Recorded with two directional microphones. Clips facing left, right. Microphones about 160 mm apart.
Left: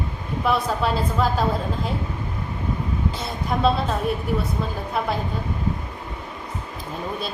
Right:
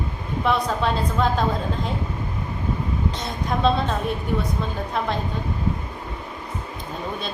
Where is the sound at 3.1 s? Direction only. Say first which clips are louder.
Even; 5° left (ahead or behind).